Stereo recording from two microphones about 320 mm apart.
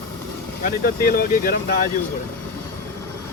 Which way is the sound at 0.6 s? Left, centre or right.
Left.